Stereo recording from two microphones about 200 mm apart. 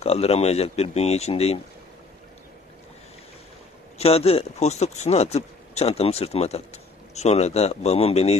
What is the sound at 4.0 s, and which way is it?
Speech, 30° left (ahead or behind).